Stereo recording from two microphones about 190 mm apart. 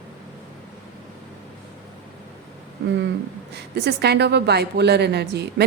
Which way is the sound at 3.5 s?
60° right (ahead or behind).